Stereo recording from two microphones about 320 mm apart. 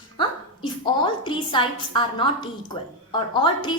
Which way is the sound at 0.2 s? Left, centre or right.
Centre.